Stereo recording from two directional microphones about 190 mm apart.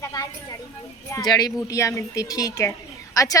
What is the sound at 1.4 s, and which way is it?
A woman's voice, 15° left (ahead or behind).